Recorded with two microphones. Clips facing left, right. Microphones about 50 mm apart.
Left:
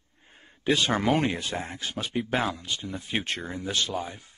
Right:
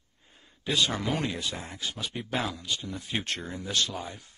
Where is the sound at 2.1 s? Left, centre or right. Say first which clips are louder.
Left 10 dB; centre.